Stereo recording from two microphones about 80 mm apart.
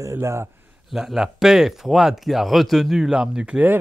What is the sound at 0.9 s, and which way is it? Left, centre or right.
Speech, centre.